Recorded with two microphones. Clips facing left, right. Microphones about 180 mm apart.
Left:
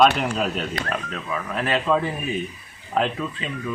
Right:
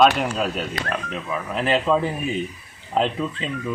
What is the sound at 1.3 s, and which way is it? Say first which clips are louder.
Speech: right 2 dB; 15° right (ahead or behind).